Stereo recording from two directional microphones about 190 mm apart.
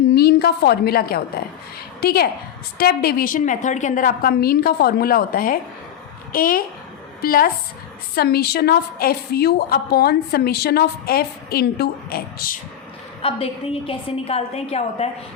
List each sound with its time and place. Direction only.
0.1 s a woman's voice: 55° left (ahead or behind)
13.2 s a woman's voice: 30° left (ahead or behind)